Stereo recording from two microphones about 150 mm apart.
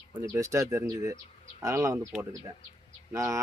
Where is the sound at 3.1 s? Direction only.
20° right (ahead or behind).